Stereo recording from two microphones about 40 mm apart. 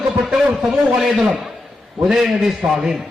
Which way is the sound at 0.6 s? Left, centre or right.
Centre.